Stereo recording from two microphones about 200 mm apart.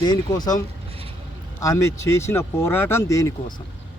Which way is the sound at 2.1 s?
10° left (ahead or behind).